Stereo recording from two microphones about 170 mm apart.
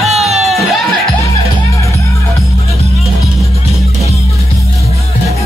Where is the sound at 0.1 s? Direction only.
40° right (ahead or behind).